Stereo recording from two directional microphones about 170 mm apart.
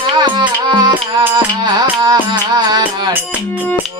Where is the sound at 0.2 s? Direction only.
25° right (ahead or behind).